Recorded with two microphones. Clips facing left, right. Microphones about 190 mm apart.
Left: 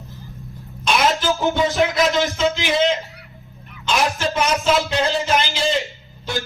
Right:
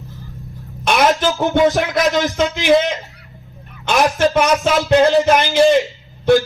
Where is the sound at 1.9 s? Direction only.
45° right (ahead or behind).